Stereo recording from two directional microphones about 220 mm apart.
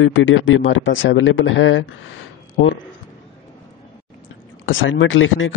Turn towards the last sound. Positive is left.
turn(degrees=60)  # may be behind; listen again after turning